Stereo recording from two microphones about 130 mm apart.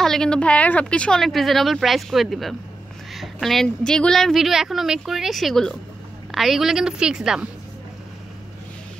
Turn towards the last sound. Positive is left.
turn(degrees=-5)  # may be behind; listen again after turning